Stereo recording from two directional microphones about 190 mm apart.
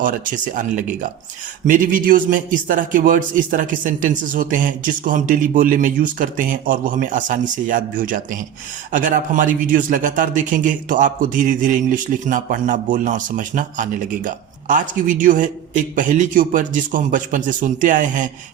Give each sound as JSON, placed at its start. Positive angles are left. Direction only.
{"t": 0.0, "sound": "a man's voice", "side_deg": -45}